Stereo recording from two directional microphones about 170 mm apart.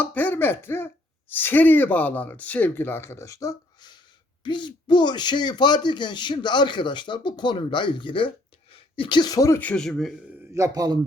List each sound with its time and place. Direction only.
0.0 s speech: 10° left (ahead or behind)
9.6 s a man's voice: 5° left (ahead or behind)
10.5 s a man's voice: 20° right (ahead or behind)